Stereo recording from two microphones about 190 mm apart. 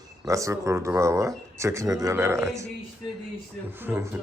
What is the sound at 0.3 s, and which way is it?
Speech, 15° right (ahead or behind).